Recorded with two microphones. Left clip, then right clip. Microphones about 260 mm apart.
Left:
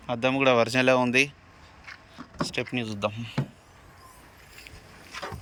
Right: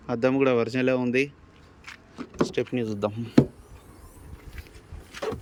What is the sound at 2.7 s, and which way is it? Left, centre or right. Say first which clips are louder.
Speech: right 2 dB; centre.